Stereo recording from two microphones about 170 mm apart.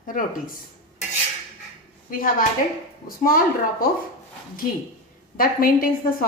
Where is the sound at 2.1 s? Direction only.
55° left (ahead or behind).